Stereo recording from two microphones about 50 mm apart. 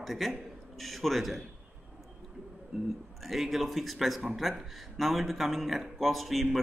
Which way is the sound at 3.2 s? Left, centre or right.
Centre.